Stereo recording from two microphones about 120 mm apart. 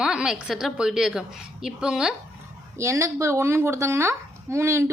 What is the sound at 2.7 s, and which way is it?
Speech, 25° right (ahead or behind).